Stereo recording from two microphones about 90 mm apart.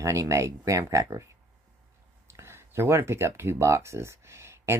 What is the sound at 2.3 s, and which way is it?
Speech, 30° right (ahead or behind).